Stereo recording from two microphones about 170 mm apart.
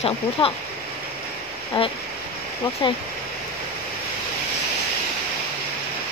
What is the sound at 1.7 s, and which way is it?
Speech, 30° left (ahead or behind).